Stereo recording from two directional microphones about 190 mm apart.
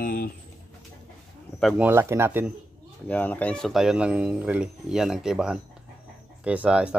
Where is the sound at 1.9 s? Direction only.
15° right (ahead or behind).